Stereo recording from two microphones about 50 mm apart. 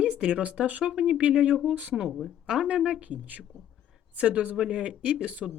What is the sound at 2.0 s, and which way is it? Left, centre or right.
Speech, centre.